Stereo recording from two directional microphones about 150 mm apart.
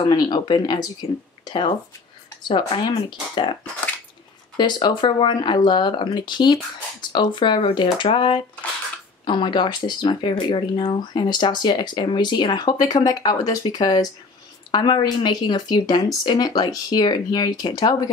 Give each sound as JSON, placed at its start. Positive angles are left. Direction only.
{"t": 0.0, "sound": "speech", "side_deg": 30}
{"t": 4.6, "sound": "speech", "side_deg": 30}